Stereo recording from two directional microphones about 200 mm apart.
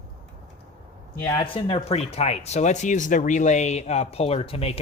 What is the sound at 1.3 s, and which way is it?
Speech, 25° left (ahead or behind).